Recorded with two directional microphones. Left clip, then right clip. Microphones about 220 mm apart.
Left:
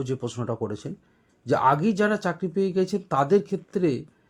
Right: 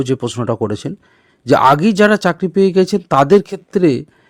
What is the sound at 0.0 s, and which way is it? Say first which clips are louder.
Speech: right 12 dB; 40° right (ahead or behind).